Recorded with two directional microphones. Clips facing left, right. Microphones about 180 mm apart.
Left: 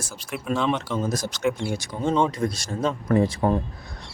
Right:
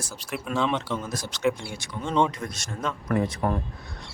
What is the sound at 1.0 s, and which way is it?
Speech, 40° left (ahead or behind).